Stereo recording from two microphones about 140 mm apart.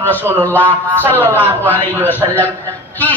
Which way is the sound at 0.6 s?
15° right (ahead or behind).